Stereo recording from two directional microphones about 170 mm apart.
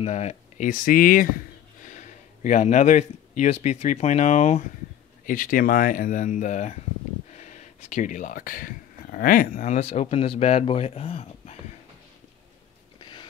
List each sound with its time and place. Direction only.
0.0 s speech: 40° left (ahead or behind); by 1.3 s 55° left (ahead or behind)
1.9 s speech: 45° left (ahead or behind)
5.2 s speech: 55° left (ahead or behind); by 11.5 s 35° left (ahead or behind)
13.0 s a sound: 30° left (ahead or behind)